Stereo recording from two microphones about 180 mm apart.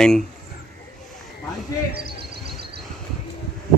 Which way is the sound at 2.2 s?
60° right (ahead or behind).